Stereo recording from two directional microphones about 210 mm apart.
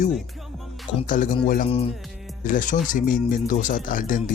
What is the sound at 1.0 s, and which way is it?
Speech, 40° left (ahead or behind).